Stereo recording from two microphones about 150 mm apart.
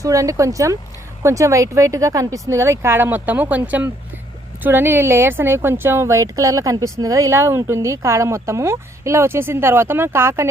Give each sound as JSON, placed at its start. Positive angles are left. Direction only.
{"t": 0.0, "sound": "speech", "side_deg": -20}